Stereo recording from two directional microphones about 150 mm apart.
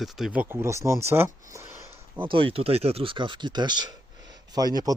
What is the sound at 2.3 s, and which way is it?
Speech, 40° right (ahead or behind).